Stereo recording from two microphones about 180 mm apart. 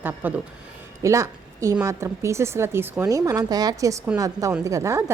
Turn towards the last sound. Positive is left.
turn(degrees=-15)  # may be behind; listen again after turning